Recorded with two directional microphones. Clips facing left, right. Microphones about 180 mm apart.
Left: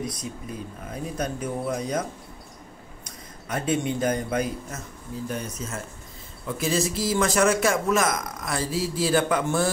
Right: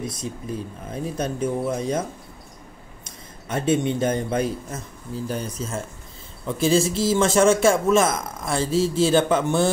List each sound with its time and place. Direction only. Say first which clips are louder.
0.0 s a man's voice: right 2 dB; 25° right (ahead or behind)